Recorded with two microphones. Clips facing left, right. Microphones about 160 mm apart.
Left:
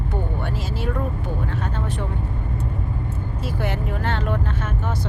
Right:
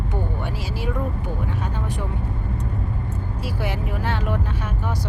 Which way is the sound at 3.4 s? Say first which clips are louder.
Left 1 dB; 10° right (ahead or behind).